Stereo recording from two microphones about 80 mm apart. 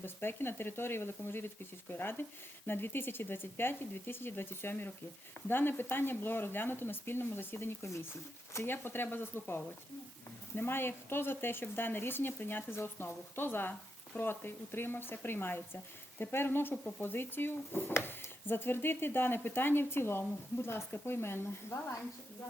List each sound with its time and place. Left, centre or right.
0.0 s speech: left